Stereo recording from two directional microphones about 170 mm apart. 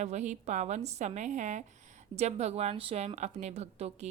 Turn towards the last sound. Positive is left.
turn(degrees=-40)  # may be behind; listen again after turning